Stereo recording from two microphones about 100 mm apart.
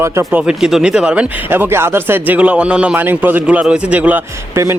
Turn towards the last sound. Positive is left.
turn(degrees=-15)  # may be behind; listen again after turning